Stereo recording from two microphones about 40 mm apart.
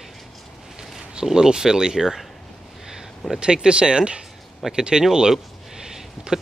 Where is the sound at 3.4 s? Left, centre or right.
Right.